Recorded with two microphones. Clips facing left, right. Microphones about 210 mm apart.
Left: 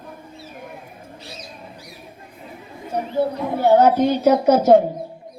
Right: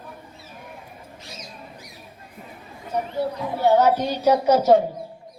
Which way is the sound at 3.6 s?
50° left (ahead or behind).